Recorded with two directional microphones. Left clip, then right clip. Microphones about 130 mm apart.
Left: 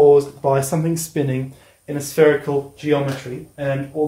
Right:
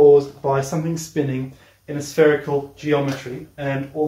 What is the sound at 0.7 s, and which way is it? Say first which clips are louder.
Speech: left 3 dB; 90° left.